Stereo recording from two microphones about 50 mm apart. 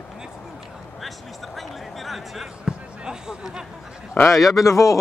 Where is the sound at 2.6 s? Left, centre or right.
Centre.